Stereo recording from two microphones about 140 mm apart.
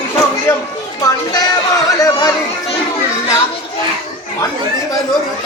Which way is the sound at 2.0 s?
25° left (ahead or behind).